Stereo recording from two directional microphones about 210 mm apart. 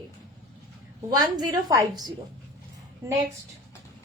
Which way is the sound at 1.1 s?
20° right (ahead or behind).